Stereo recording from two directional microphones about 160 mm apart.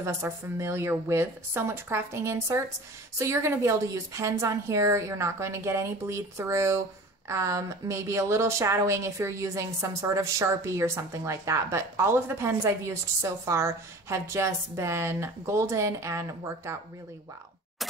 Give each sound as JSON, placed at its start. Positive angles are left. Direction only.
{"t": 0.0, "sound": "speech", "side_deg": -15}